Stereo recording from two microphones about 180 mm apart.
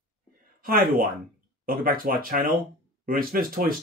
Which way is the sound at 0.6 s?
50° right (ahead or behind).